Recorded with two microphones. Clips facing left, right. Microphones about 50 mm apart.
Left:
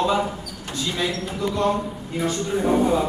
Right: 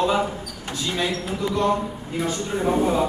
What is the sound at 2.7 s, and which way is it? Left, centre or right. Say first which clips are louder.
Speech: left 1 dB; centre.